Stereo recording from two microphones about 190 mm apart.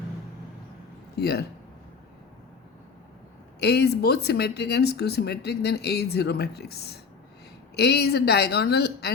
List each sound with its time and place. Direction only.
1.1 s speech: 55° left (ahead or behind)
3.6 s speech: 60° left (ahead or behind)